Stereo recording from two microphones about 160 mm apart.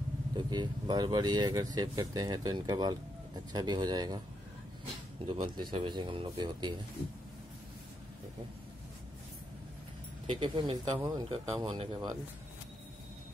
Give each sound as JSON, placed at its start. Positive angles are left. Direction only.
{"t": 0.4, "sound": "speech", "side_deg": -25}
{"t": 5.2, "sound": "speech", "side_deg": -35}
{"t": 10.2, "sound": "speech", "side_deg": -30}